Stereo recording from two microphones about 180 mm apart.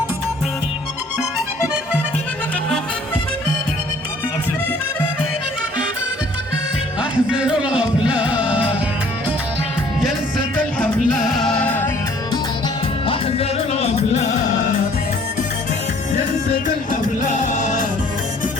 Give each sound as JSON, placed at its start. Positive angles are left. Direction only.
{"t": 7.0, "sound": "music", "side_deg": -5}
{"t": 10.0, "sound": "music", "side_deg": 0}
{"t": 13.1, "sound": "music", "side_deg": 35}
{"t": 16.5, "sound": "music", "side_deg": 50}